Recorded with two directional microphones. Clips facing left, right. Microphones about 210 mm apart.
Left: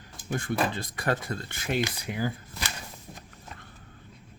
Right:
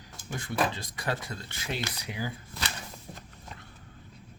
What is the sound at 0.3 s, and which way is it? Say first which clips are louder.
Speech: left 2 dB; 55° left (ahead or behind).